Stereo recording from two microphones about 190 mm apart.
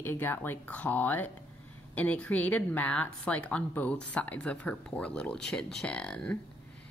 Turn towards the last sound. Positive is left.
turn(degrees=5)  # may be behind; listen again after turning